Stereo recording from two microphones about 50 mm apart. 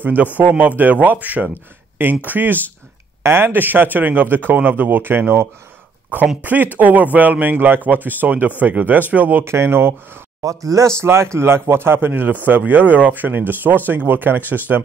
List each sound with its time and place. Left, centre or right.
0.0 s speech: right
1.5 s speech: right
3.2 s speech: right
6.4 s speech: right
9.4 s speech: right
10.4 s speech: right